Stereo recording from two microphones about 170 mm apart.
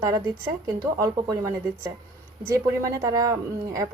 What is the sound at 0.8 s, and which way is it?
Speech, 20° right (ahead or behind).